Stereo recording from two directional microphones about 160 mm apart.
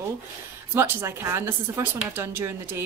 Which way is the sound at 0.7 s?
15° right (ahead or behind).